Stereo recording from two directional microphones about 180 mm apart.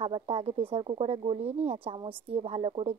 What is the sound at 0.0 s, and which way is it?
Speech, 35° right (ahead or behind).